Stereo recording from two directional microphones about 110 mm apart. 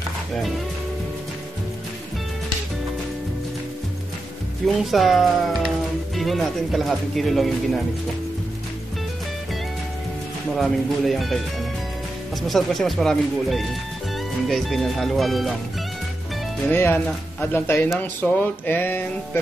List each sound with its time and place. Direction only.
4.6 s speech: centre (ahead or behind)
10.6 s speech: centre (ahead or behind)
16.6 s speech: 20° left (ahead or behind)